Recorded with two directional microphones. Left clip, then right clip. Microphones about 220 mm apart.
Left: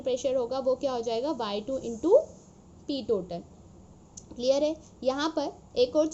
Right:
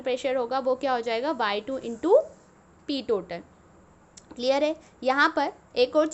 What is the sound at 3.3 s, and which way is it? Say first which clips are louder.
A woman's voice: right 2 dB; 15° right (ahead or behind).